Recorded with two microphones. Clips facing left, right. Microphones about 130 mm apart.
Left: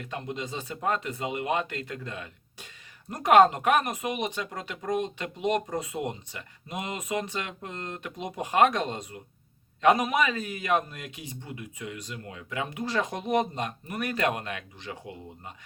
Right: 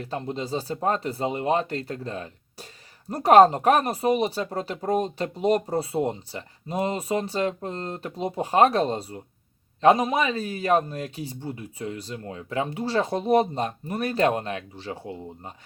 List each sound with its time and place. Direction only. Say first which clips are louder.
0.0 s speech: right 4 dB; 35° right (ahead or behind)